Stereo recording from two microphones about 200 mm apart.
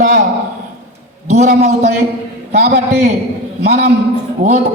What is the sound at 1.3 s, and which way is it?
Speech, 40° right (ahead or behind).